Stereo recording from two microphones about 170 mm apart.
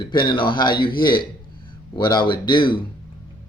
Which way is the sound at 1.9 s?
25° left (ahead or behind).